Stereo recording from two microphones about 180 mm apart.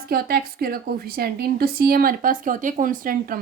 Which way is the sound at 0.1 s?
55° right (ahead or behind).